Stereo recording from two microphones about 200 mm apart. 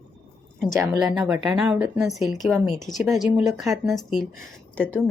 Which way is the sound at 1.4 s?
5° right (ahead or behind).